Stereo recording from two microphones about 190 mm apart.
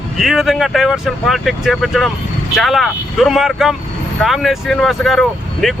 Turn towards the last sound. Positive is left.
turn(degrees=0)  # may be behind; listen again after turning